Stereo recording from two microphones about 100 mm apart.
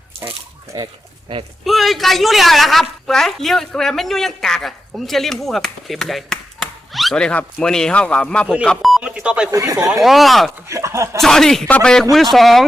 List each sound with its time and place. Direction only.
1.6 s a woman's voice: centre (ahead or behind)
9.5 s speech: 35° right (ahead or behind)
10.0 s a woman's voice: centre (ahead or behind)
10.7 s speech: 30° right (ahead or behind)
11.2 s a woman's voice: 5° left (ahead or behind)